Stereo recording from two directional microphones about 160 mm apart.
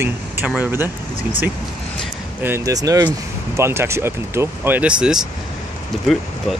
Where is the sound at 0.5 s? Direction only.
10° right (ahead or behind).